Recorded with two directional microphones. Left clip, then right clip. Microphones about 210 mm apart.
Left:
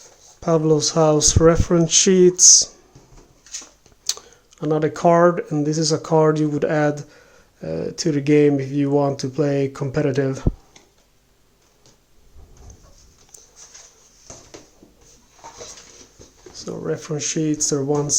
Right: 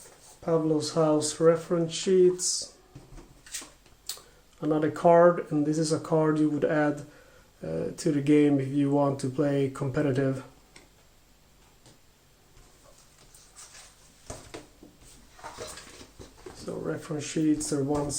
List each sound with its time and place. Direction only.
0.4 s speech: 45° left (ahead or behind)
4.5 s speech: 35° left (ahead or behind)
16.8 s speech: 40° left (ahead or behind)